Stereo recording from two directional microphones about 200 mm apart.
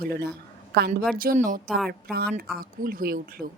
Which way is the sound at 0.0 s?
50° right (ahead or behind).